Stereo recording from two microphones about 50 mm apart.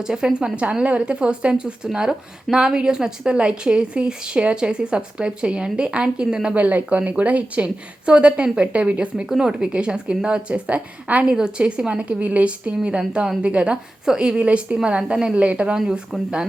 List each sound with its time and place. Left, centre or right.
0.0 s speech: centre
6.6 s speech: right
14.0 s speech: centre